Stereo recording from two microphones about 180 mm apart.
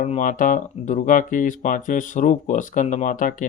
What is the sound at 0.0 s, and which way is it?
Speech, 45° left (ahead or behind).